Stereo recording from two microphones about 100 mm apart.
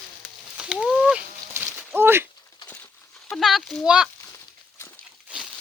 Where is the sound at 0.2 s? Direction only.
10° right (ahead or behind).